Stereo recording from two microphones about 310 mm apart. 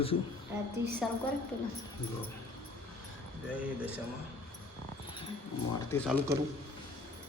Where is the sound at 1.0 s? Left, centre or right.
Centre.